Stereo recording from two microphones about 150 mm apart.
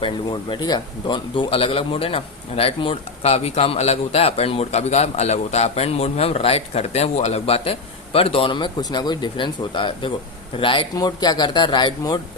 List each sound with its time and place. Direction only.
0.0 s a man's voice: 30° left (ahead or behind)